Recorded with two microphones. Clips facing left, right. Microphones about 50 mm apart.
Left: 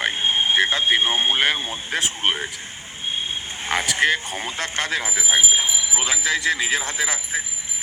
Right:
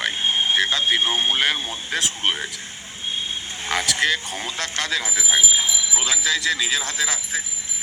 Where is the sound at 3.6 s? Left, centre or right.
Left.